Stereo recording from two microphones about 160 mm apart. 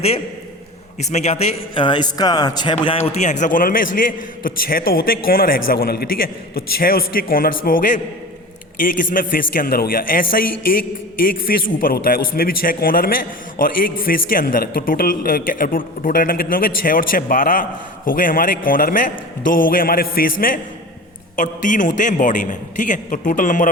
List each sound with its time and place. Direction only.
1.1 s a man's voice: 45° left (ahead or behind)
3.1 s a man's voice: 45° left (ahead or behind)
11.4 s a man's voice: 65° left (ahead or behind)